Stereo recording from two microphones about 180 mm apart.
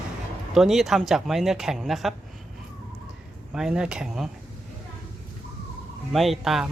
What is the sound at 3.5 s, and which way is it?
Speech, 5° right (ahead or behind).